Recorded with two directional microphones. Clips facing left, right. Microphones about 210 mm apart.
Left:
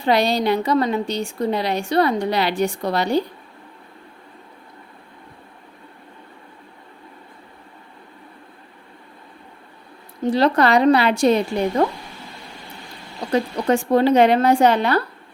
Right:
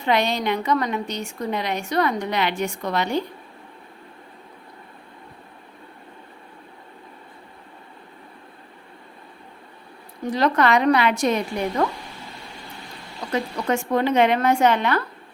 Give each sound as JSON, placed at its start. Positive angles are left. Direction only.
{"t": 0.0, "sound": "a woman's voice", "side_deg": 35}
{"t": 10.2, "sound": "a woman's voice", "side_deg": 30}
{"t": 13.3, "sound": "a woman's voice", "side_deg": 35}